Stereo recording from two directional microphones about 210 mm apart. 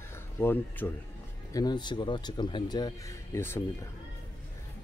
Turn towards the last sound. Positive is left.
turn(degrees=10)  # may be behind; listen again after turning